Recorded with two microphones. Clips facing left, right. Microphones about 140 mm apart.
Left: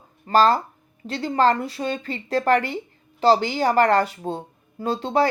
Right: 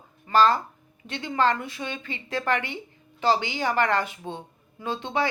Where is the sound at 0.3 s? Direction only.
40° left (ahead or behind).